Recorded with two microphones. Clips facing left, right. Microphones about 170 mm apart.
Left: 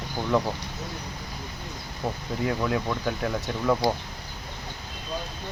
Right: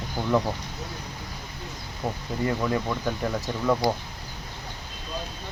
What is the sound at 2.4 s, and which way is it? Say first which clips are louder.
Speech: even; centre (ahead or behind).